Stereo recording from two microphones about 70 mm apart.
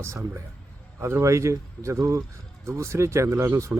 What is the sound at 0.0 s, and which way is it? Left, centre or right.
A man's voice, right.